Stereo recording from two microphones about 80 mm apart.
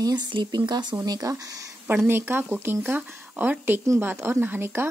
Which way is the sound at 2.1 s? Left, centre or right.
Right.